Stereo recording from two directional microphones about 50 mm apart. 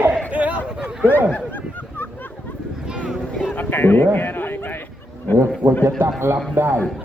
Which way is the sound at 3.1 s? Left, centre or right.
Centre.